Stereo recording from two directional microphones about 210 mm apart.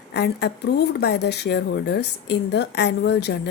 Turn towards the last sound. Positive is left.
turn(degrees=55)  # may be behind; listen again after turning